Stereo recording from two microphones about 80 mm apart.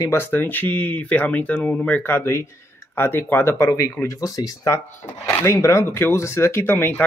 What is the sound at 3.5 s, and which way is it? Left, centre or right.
Speech, left.